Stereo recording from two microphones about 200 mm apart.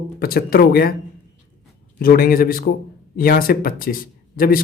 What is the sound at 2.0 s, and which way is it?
Speech, 45° left (ahead or behind).